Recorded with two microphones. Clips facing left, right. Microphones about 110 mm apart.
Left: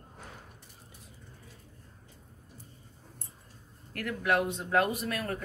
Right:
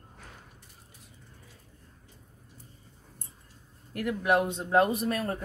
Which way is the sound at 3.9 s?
20° right (ahead or behind).